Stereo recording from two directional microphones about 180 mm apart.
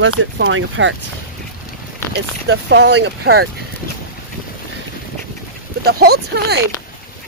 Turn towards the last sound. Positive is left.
turn(degrees=-65)  # may be behind; listen again after turning